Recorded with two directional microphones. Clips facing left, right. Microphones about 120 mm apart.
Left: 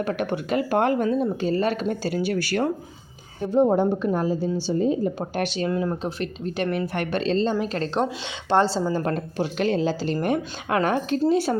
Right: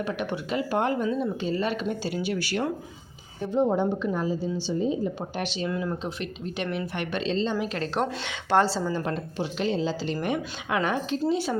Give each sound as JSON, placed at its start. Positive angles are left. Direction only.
{"t": 0.0, "sound": "a woman's voice", "side_deg": 50}
{"t": 8.2, "sound": "a woman's voice", "side_deg": 25}
{"t": 8.9, "sound": "speech", "side_deg": 50}